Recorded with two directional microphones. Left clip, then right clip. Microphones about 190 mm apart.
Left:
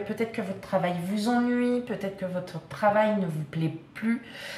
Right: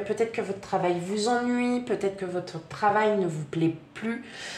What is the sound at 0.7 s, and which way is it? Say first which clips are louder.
A woman's voice: even; 35° right (ahead or behind).